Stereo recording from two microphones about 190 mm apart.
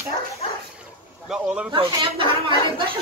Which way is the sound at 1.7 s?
25° right (ahead or behind).